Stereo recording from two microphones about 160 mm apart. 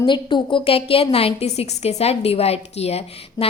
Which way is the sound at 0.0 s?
30° left (ahead or behind).